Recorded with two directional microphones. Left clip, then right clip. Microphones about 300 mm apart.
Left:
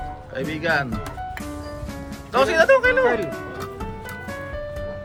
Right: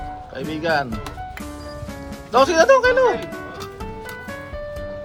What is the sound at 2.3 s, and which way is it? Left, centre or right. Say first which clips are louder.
Speech: right 2 dB; centre.